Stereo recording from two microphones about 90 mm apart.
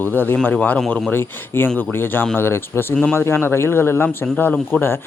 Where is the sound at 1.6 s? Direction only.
20° left (ahead or behind).